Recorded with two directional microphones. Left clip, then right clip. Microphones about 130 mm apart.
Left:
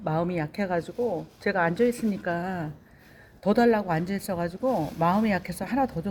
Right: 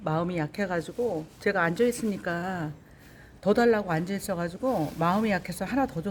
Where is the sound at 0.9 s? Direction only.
30° right (ahead or behind).